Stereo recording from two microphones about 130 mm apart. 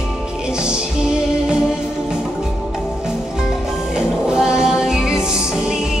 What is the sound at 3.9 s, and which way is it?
Music, 5° right (ahead or behind).